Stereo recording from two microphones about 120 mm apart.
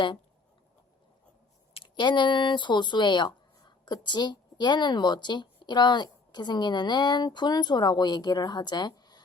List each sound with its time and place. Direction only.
2.0 s speech: 40° left (ahead or behind)